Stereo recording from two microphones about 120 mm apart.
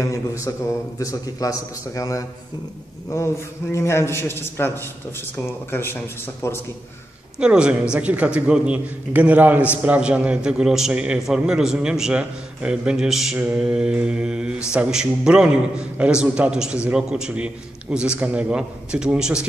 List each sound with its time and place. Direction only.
0.0 s a man's voice: 25° left (ahead or behind)
3.7 s a man's voice: 20° left (ahead or behind)
7.3 s a man's voice: 10° right (ahead or behind)